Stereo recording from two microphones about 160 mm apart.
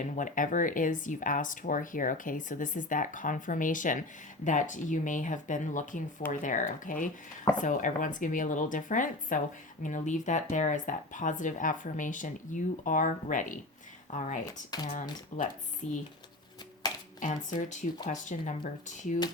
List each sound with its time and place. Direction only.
0.0 s speech: 50° left (ahead or behind)
17.2 s speech: 50° left (ahead or behind)